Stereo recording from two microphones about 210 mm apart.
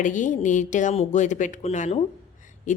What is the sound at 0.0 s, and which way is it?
Speech, 35° left (ahead or behind).